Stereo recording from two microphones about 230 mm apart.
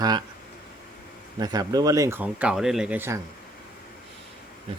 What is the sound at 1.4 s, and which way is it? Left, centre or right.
Speech, centre.